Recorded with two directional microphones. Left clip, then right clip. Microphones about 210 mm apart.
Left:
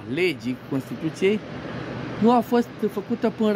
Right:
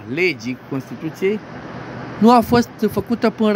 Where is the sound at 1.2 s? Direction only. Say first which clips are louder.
Right 2 dB; 5° left (ahead or behind).